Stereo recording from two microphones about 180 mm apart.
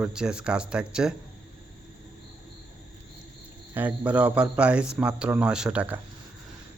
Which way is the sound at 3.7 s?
10° right (ahead or behind).